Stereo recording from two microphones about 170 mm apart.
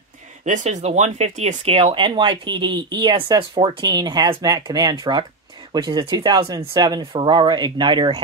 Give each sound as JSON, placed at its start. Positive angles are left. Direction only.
{"t": 0.5, "sound": "speech", "side_deg": -45}